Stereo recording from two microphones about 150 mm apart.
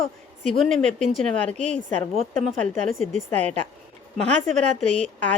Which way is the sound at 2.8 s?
40° left (ahead or behind).